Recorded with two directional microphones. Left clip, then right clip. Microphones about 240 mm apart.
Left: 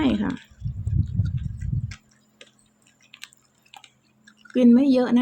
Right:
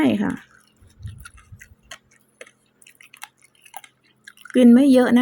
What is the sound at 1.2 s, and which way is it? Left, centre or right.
Tick-tock, right.